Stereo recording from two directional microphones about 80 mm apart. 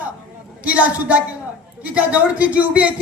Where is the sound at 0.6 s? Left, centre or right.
Centre.